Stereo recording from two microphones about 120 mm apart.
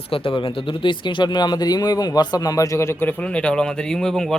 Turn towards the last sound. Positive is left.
turn(degrees=5)  # may be behind; listen again after turning